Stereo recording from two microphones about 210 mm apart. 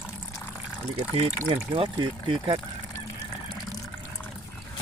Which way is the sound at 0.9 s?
30° right (ahead or behind).